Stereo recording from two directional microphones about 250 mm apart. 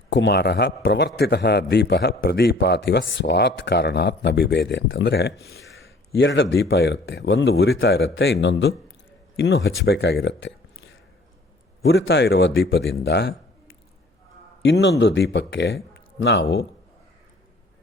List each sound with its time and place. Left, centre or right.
0.1 s a man's voice: left
14.6 s speech: left